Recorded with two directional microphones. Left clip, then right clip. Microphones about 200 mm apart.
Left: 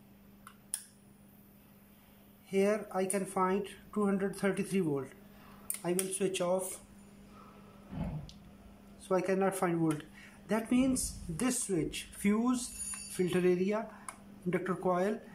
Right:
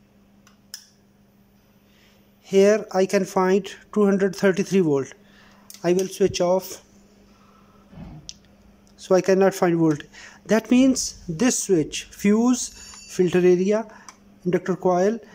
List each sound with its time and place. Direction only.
2.4 s speech: 40° right (ahead or behind)
9.0 s speech: 40° right (ahead or behind)